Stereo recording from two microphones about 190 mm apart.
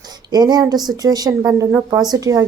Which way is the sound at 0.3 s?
20° right (ahead or behind).